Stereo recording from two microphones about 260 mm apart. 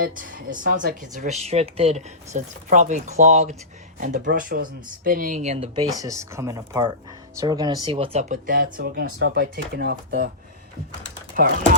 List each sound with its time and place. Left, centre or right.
0.0 s speech: right
6.0 s speech: centre; by 9.0 s right
9.0 s speech: right
9.3 s speech: right
11.4 s speech: right